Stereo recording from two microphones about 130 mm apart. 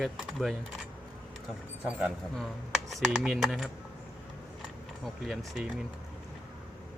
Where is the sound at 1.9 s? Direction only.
10° right (ahead or behind).